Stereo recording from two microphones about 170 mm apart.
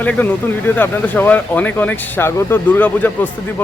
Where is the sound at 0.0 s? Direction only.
10° left (ahead or behind).